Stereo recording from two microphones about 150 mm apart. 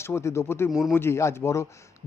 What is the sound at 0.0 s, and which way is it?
Speech, 20° left (ahead or behind).